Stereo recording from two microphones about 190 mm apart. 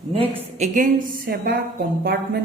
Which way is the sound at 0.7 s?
50° right (ahead or behind).